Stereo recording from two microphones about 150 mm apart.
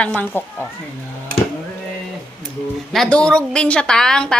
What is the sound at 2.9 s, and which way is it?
A woman's voice, 5° left (ahead or behind).